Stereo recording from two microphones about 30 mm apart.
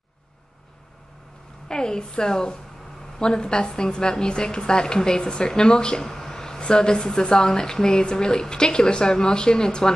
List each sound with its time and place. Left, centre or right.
1.7 s a woman's voice: left
5.6 s a sound: left
6.6 s a woman's voice: left